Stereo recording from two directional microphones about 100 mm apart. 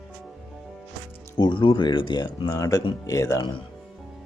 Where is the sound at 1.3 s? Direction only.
50° left (ahead or behind); by 3.4 s 35° left (ahead or behind).